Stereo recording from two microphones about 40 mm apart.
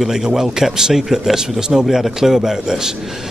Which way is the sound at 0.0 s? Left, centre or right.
Centre.